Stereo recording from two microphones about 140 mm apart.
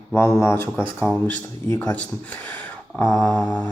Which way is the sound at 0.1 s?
20° left (ahead or behind).